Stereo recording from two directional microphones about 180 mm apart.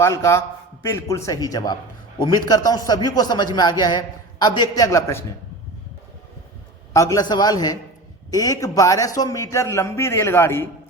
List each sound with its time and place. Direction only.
0.0 s a man's voice: 15° left (ahead or behind)
6.9 s a man's voice: 20° left (ahead or behind)